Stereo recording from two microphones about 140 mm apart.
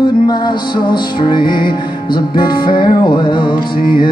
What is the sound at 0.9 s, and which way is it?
Music, 35° left (ahead or behind).